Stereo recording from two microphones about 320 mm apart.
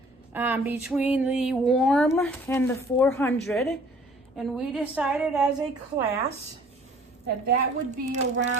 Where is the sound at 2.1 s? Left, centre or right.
Centre.